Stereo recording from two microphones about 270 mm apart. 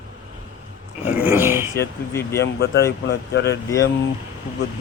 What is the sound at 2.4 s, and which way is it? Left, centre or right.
Speech, left.